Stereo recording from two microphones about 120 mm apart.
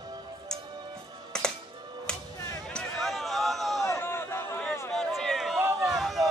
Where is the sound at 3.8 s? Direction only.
20° left (ahead or behind).